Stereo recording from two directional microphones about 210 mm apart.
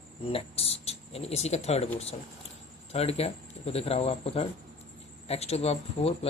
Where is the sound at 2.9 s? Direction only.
30° left (ahead or behind).